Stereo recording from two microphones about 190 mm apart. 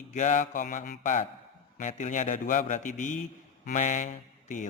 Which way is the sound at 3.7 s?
40° left (ahead or behind).